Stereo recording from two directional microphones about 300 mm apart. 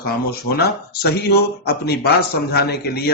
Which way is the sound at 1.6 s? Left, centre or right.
Left.